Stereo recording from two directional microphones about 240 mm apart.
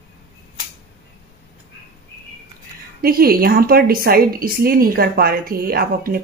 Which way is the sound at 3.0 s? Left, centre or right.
Right.